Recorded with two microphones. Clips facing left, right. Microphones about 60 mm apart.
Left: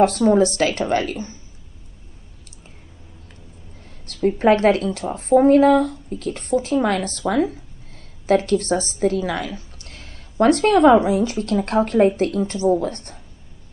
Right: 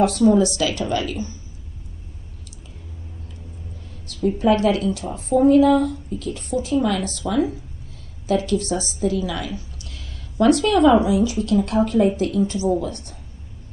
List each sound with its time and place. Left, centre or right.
0.0 s a woman's voice: left
4.1 s a woman's voice: left